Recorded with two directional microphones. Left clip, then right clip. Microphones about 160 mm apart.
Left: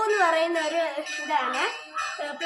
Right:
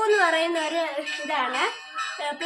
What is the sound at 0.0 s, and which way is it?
Speech, 15° right (ahead or behind).